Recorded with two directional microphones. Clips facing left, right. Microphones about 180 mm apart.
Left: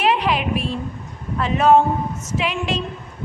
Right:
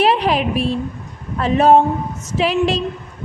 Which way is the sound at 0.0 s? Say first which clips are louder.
Right 4 dB; 35° right (ahead or behind).